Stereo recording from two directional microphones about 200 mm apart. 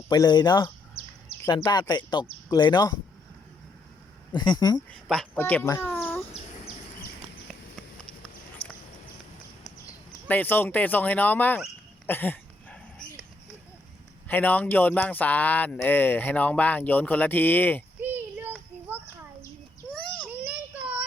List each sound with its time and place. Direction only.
0.1 s speech: 20° left (ahead or behind)
4.4 s speech: 20° left (ahead or behind)
4.9 s speech: 5° left (ahead or behind)
8.6 s a sound: 30° left (ahead or behind)
10.2 s speech: 10° left (ahead or behind)
12.0 s a sound: 10° left (ahead or behind)
14.3 s speech: 10° left (ahead or behind)
18.0 s children playing: 10° right (ahead or behind)
20.2 s child singing: 10° right (ahead or behind)